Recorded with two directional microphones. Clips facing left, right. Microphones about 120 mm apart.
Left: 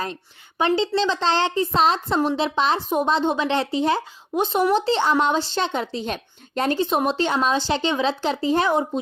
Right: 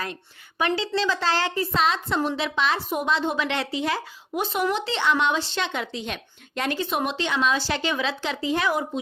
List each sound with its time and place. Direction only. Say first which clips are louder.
0.6 s a woman's voice: left 4 dB; 25° left (ahead or behind)